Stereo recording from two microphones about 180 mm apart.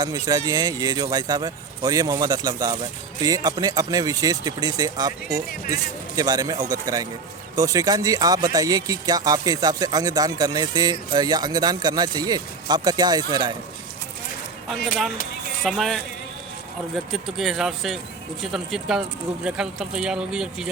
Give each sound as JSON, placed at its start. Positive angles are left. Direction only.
{"t": 0.0, "sound": "speech", "side_deg": -20}
{"t": 15.6, "sound": "speech", "side_deg": 0}